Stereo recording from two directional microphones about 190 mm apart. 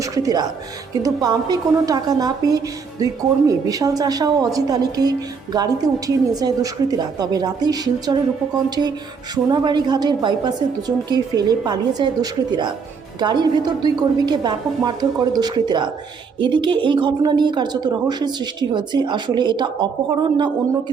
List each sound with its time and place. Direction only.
0.0 s speech: 20° right (ahead or behind)
9.3 s speech: 20° right (ahead or behind)